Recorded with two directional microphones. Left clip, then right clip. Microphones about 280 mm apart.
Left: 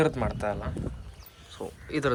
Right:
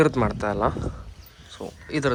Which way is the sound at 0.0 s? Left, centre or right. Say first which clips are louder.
Right 5 dB; centre.